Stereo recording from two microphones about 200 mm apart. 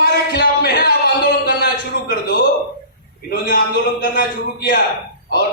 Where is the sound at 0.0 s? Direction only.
50° left (ahead or behind).